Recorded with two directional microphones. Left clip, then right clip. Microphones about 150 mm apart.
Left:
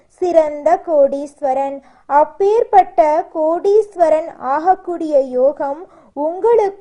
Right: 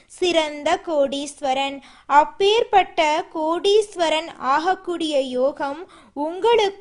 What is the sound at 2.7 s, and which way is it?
A woman's voice, 25° right (ahead or behind).